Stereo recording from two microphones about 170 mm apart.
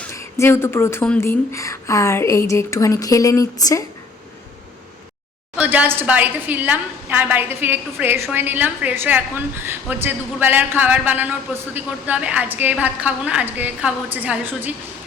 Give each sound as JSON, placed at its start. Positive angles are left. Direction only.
{"t": 0.0, "sound": "a woman's voice", "side_deg": 15}
{"t": 5.5, "sound": "a woman's voice", "side_deg": -10}